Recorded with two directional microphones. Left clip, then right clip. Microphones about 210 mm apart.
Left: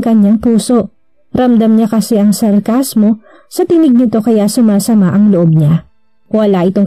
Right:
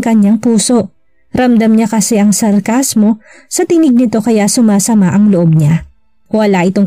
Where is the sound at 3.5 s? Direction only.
50° right (ahead or behind).